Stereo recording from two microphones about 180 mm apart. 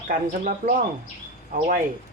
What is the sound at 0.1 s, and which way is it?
Speech, 50° right (ahead or behind).